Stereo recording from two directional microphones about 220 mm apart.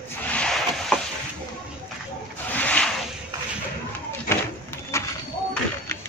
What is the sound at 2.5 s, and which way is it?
Rub, 5° left (ahead or behind).